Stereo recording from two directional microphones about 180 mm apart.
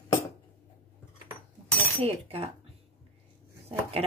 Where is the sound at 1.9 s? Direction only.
35° right (ahead or behind).